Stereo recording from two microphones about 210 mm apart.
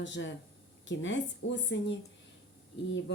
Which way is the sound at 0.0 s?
60° left (ahead or behind).